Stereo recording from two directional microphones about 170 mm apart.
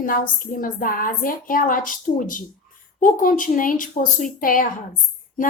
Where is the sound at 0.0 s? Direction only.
55° left (ahead or behind).